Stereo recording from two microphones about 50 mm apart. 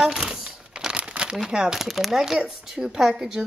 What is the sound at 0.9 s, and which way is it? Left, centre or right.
Crumpling, right.